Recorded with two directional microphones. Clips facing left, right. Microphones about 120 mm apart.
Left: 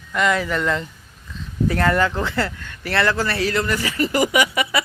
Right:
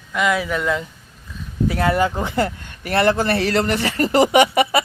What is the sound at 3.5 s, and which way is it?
Speech, 65° right (ahead or behind).